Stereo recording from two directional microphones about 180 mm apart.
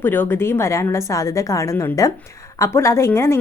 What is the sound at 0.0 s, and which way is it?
A woman's voice, 10° left (ahead or behind).